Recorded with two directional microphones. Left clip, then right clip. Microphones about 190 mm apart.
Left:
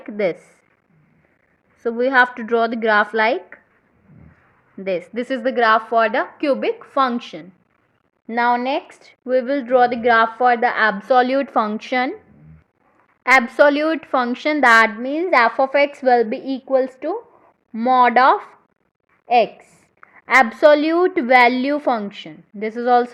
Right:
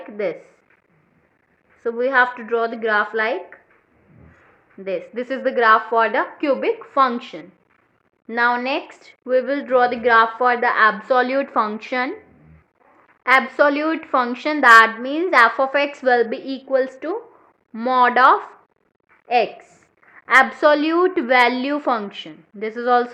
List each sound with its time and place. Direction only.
0.0 s a woman's voice: 45° left (ahead or behind)
1.8 s a woman's voice: 40° left (ahead or behind)
4.8 s a woman's voice: 50° left (ahead or behind)
13.2 s a woman's voice: 40° left (ahead or behind)